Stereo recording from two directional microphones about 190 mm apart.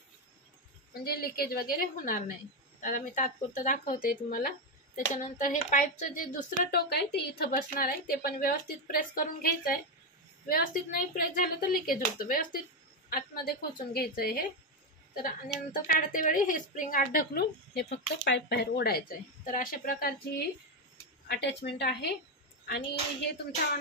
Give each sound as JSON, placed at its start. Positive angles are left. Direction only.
{"t": 1.0, "sound": "a woman's voice", "side_deg": 55}
{"t": 21.3, "sound": "a woman's voice", "side_deg": 65}